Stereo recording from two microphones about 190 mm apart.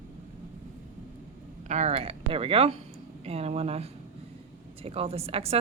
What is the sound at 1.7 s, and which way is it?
A woman's voice, 35° right (ahead or behind).